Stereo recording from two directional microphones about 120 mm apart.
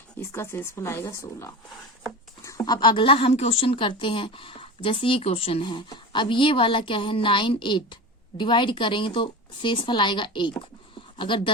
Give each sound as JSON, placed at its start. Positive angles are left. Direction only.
{"t": 0.3, "sound": "a woman's voice", "side_deg": 20}